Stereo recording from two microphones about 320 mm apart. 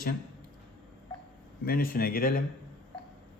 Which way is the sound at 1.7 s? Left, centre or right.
Left.